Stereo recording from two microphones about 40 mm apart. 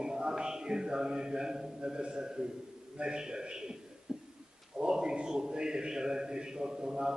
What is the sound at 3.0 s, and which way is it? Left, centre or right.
A man's voice, right.